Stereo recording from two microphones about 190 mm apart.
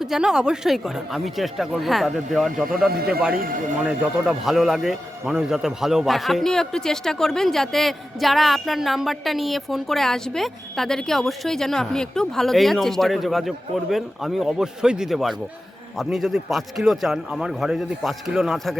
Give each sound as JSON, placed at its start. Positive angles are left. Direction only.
{"t": 0.0, "sound": "a man's voice", "side_deg": 0}
{"t": 3.3, "sound": "speech", "side_deg": -50}
{"t": 3.8, "sound": "a man's voice", "side_deg": -5}